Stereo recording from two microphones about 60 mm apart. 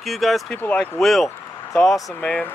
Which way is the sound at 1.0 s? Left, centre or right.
Centre.